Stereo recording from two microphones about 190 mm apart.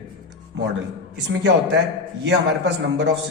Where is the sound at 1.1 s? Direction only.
65° right (ahead or behind).